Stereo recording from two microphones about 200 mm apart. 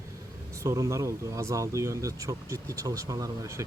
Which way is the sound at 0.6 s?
15° right (ahead or behind).